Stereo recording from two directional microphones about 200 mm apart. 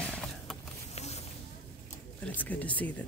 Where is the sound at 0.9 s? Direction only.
30° left (ahead or behind).